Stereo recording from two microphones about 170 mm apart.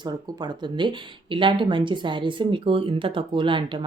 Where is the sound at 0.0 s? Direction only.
25° right (ahead or behind).